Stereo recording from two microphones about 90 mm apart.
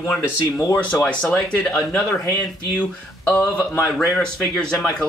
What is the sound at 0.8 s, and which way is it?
Speech, 15° left (ahead or behind).